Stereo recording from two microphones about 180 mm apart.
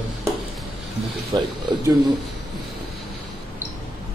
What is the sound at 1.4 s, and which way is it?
Speech, 25° right (ahead or behind).